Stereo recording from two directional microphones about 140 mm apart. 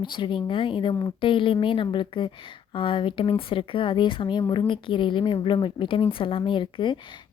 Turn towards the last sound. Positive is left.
turn(degrees=35)  # may be behind; listen again after turning